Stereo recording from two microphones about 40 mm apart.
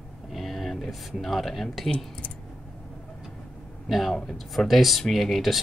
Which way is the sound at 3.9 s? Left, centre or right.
Centre.